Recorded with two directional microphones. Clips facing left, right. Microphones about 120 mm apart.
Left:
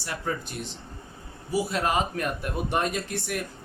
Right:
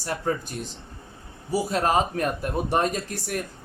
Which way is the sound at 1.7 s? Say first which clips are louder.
Right 6 dB; 40° right (ahead or behind).